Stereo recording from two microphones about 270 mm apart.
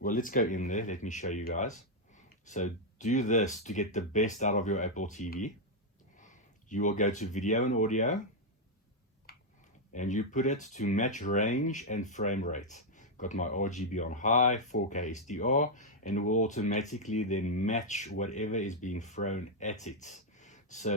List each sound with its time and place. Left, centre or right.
0.0 s speech: left
9.3 s a sound: left
9.9 s speech: left